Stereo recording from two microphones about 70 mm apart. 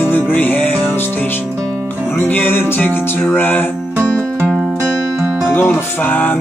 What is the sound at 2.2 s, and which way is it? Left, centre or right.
Music, left.